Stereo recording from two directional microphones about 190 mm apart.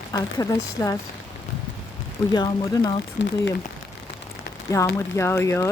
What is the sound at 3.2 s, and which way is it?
Speech, 65° left (ahead or behind).